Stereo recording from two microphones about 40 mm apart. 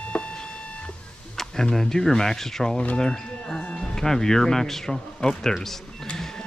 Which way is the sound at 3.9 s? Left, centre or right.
Centre.